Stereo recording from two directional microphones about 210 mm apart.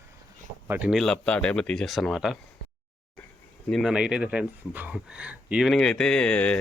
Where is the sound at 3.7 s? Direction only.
Centre (ahead or behind).